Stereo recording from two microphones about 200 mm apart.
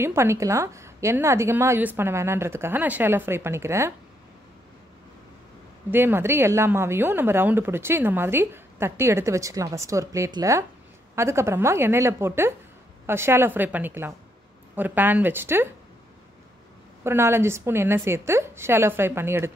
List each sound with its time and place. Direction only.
0.0 s a woman's voice: 15° right (ahead or behind)
5.9 s a woman's voice: 10° right (ahead or behind)
17.0 s a woman's voice: 10° right (ahead or behind)